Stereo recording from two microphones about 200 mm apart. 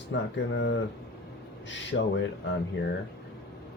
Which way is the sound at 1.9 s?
60° left (ahead or behind).